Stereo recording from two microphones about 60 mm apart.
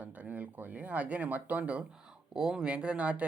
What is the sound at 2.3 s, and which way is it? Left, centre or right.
Speech, centre.